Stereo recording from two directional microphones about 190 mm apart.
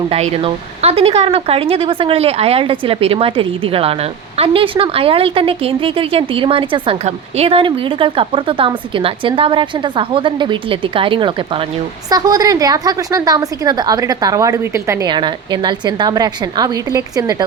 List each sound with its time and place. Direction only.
0.1 s speech: 30° right (ahead or behind)